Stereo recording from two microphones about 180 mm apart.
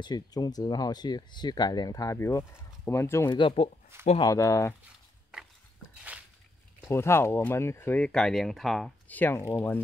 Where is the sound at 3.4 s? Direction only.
30° left (ahead or behind).